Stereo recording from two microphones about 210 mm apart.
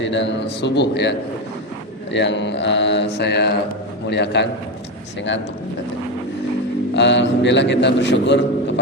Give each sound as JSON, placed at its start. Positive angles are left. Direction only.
{"t": 0.0, "sound": "a man's voice", "side_deg": 60}
{"t": 2.1, "sound": "a man's voice", "side_deg": 55}
{"t": 6.9, "sound": "a man's voice", "side_deg": 55}